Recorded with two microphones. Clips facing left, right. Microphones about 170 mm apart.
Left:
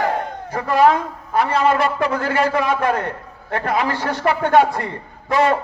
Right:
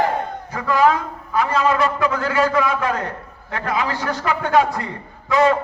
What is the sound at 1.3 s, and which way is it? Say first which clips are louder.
A man's voice: left 1 dB; 55° left (ahead or behind).